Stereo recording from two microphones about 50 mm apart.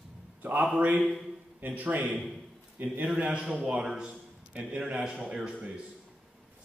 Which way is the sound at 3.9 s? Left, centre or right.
Right.